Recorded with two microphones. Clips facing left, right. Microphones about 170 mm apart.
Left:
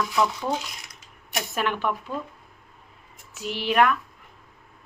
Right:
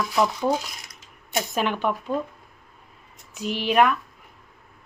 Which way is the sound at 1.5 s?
20° right (ahead or behind).